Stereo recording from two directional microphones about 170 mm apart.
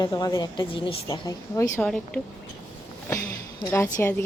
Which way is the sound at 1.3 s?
20° left (ahead or behind).